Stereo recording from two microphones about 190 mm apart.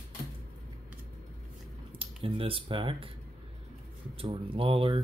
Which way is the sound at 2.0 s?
30° right (ahead or behind).